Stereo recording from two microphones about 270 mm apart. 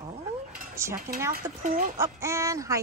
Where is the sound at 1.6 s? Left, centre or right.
Right.